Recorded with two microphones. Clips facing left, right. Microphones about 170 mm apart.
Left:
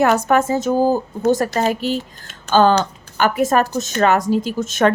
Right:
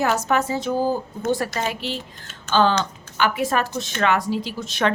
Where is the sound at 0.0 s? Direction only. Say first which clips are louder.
Left 6 dB; 60° left (ahead or behind).